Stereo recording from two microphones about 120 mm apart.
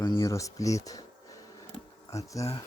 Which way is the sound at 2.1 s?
25° left (ahead or behind).